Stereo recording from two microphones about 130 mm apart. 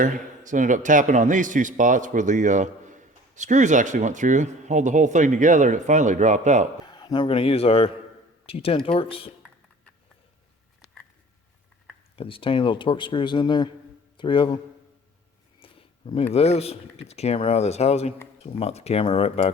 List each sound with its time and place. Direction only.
0.0 s a man's voice: 80° right
6.8 s a man's voice: 35° left (ahead or behind)
12.1 s speech: 45° left (ahead or behind)
15.6 s speech: 45° left (ahead or behind)